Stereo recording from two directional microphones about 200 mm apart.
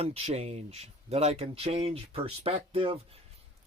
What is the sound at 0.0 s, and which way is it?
Speech, 30° right (ahead or behind).